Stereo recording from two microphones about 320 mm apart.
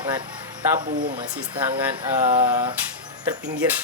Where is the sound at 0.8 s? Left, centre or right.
Right.